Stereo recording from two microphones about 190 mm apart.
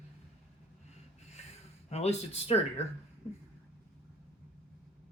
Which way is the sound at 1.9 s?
35° left (ahead or behind).